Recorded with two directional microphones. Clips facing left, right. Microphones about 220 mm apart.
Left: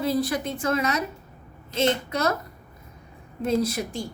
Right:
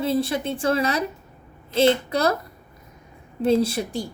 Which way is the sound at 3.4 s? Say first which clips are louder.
Right 4 dB; 30° right (ahead or behind).